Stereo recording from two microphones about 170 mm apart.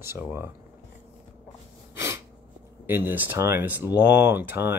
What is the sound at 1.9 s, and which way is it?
Sneeze, 15° right (ahead or behind).